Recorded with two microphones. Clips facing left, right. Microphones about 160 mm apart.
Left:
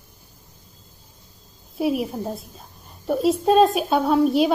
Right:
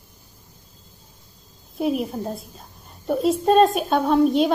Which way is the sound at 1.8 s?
5° left (ahead or behind).